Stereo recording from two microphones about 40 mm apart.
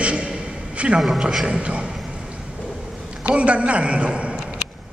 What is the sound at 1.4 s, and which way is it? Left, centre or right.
Speech, right.